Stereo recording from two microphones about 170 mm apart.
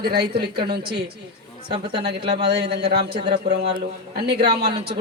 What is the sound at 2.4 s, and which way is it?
A man's voice, 75° right (ahead or behind).